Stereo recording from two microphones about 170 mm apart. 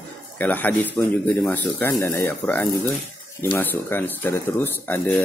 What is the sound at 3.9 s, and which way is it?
Speech, 10° left (ahead or behind).